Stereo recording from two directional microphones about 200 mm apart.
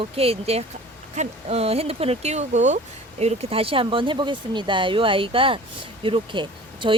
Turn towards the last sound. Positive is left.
turn(degrees=-25)  # may be behind; listen again after turning